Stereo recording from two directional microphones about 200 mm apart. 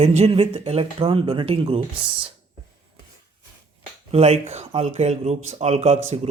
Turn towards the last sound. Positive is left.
turn(degrees=-30)  # may be behind; listen again after turning